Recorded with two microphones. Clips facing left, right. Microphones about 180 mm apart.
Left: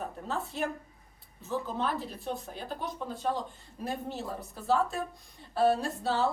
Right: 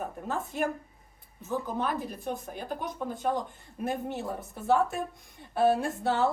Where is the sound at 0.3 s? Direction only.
15° right (ahead or behind).